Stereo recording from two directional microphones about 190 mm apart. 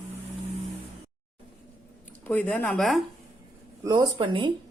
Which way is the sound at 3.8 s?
20° right (ahead or behind).